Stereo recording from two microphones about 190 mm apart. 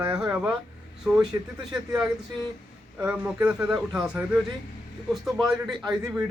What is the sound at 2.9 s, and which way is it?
Speech, 10° right (ahead or behind).